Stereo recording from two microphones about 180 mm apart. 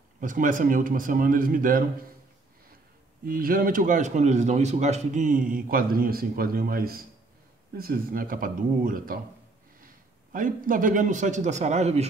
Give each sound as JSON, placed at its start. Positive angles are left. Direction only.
{"t": 0.2, "sound": "speech", "side_deg": -45}
{"t": 3.3, "sound": "a man's voice", "side_deg": -50}